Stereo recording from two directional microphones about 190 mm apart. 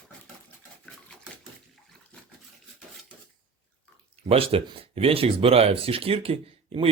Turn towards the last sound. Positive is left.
turn(degrees=-30)  # may be behind; listen again after turning